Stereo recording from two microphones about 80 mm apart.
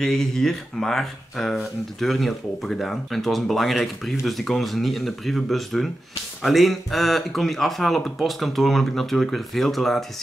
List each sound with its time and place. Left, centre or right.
0.0 s speech: centre